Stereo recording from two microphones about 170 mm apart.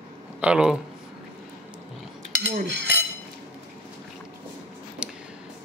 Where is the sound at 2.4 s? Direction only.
90° right.